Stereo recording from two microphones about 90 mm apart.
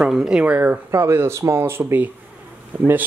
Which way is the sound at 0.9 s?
30° right (ahead or behind).